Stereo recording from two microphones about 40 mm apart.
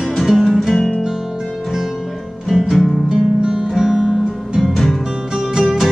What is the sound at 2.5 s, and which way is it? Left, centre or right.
Music, centre.